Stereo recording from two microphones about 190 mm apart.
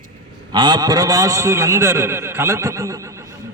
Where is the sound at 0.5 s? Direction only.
25° right (ahead or behind).